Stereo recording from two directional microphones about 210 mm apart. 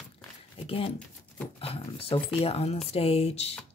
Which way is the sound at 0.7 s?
25° left (ahead or behind).